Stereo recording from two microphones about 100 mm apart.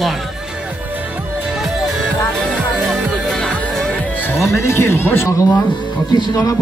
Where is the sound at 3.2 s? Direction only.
10° left (ahead or behind).